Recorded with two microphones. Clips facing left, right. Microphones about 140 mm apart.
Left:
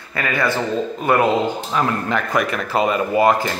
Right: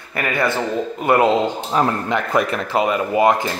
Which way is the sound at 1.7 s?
35° right (ahead or behind).